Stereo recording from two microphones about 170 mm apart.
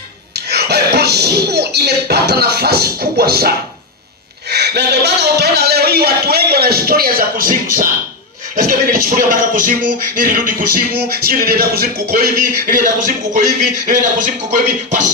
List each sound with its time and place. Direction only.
0.3 s a man's voice: 70° right (ahead or behind); by 7.9 s 55° right (ahead or behind)
8.5 s music: 55° right (ahead or behind)